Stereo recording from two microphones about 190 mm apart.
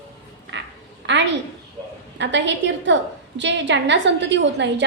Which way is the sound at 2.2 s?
70° right (ahead or behind).